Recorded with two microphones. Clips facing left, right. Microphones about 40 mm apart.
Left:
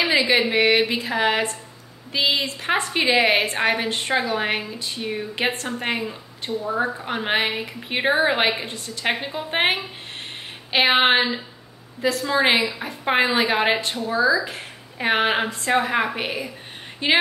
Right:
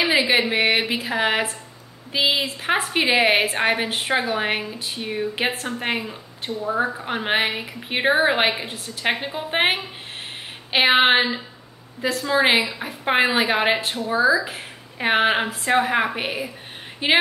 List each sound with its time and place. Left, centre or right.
0.0 s a woman's voice: centre
13.9 s a woman's voice: centre
17.0 s a woman's voice: centre